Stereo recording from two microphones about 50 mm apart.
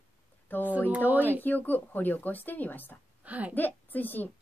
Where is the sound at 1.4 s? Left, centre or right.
Left.